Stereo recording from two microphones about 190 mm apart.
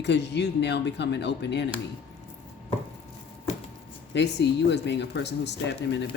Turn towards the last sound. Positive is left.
turn(degrees=65)  # may be behind; listen again after turning